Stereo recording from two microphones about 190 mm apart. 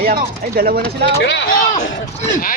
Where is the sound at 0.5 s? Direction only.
50° right (ahead or behind).